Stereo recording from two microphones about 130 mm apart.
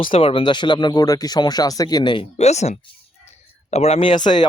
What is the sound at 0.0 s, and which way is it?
Speech, 45° left (ahead or behind).